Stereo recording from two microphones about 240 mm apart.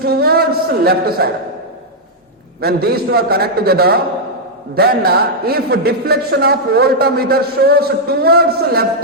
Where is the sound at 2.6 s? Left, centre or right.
Right.